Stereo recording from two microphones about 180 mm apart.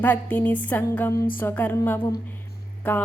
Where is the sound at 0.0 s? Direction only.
10° left (ahead or behind).